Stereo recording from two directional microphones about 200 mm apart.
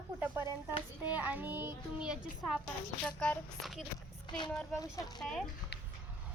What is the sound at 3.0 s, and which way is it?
Speech, 5° left (ahead or behind).